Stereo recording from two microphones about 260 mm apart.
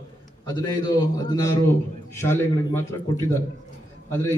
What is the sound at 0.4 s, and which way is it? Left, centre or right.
A man's voice, centre.